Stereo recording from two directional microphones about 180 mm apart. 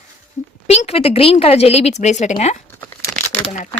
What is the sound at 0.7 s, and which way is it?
Speech, 35° left (ahead or behind).